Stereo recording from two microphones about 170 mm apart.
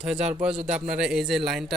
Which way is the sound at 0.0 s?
5° right (ahead or behind).